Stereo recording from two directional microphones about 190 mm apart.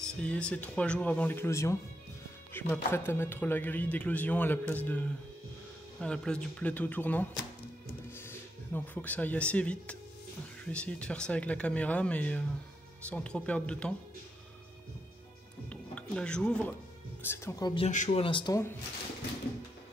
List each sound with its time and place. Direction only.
0.0 s speech: 5° left (ahead or behind)
8.3 s speech: 10° left (ahead or behind)
15.7 s speech: 5° left (ahead or behind)
17.8 s speech: 40° left (ahead or behind)
18.2 s speech: 25° left (ahead or behind)